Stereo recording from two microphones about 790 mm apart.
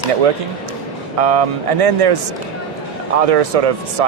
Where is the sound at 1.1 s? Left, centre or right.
Right.